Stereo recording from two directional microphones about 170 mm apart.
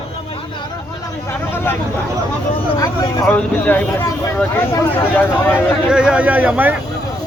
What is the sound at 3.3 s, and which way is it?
Speech, 10° left (ahead or behind).